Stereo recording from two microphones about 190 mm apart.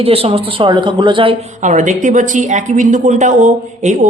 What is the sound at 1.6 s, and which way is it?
Speech, 40° right (ahead or behind).